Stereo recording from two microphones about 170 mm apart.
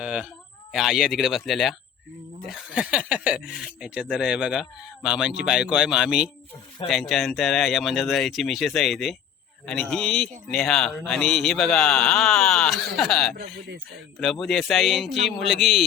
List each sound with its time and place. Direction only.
0.0 s a sound: 5° right (ahead or behind)
0.7 s speech: centre (ahead or behind)
13.3 s speech: 75° right (ahead or behind)
14.2 s speech: centre (ahead or behind)